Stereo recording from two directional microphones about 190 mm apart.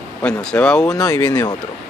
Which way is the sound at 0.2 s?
5° left (ahead or behind).